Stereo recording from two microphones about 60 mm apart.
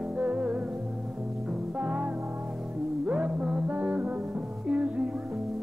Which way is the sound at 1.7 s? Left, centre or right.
Right.